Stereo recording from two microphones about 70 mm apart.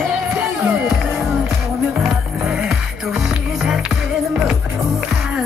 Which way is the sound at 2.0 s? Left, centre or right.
Centre.